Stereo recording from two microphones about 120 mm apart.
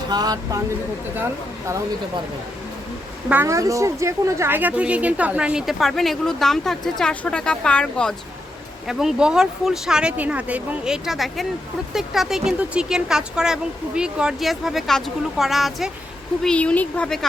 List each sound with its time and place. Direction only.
0.1 s speech: 35° right (ahead or behind)
3.4 s speech: 25° right (ahead or behind); by 8.1 s 5° left (ahead or behind)
8.9 s speech: 5° right (ahead or behind)